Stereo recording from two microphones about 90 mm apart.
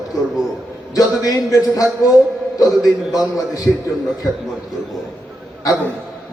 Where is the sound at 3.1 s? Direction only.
45° left (ahead or behind).